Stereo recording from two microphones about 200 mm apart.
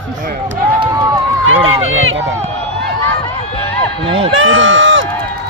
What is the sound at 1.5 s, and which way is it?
Run, 85° right.